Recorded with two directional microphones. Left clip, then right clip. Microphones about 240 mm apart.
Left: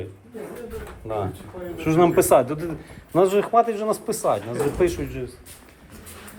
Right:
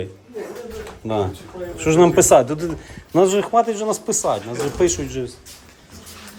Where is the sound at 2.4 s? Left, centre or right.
Right.